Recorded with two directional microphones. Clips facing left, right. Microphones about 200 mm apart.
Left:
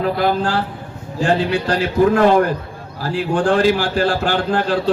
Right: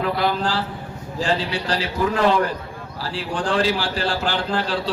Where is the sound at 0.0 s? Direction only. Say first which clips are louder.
Left 4 dB; 50° left (ahead or behind).